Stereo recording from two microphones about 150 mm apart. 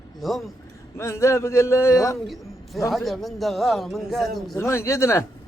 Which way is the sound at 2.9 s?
Centre (ahead or behind).